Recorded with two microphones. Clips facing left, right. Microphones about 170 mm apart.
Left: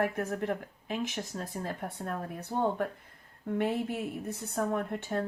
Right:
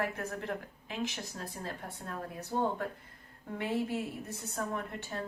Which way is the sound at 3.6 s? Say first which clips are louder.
Left 2 dB; 55° left (ahead or behind).